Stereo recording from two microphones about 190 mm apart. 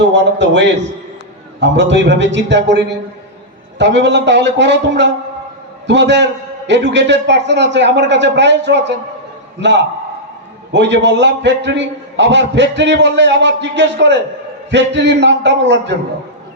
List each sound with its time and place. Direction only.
0.1 s a man's voice: 70° right (ahead or behind)